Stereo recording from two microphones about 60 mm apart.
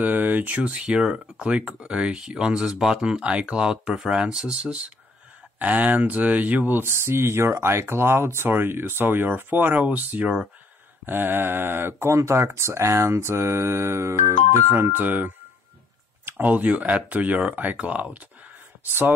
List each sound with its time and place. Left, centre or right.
0.0 s speech: right
11.1 s speech: right
12.1 s speech: right